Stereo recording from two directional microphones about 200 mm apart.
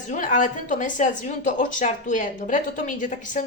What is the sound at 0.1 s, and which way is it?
A woman's voice, 40° left (ahead or behind).